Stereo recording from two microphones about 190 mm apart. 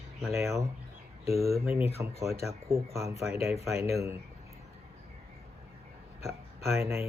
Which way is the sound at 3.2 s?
15° right (ahead or behind).